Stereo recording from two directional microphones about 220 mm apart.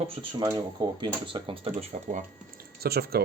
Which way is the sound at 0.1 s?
25° right (ahead or behind).